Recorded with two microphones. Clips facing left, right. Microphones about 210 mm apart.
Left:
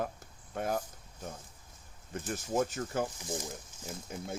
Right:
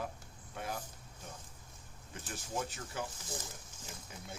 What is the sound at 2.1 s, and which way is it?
Speech, 45° left (ahead or behind).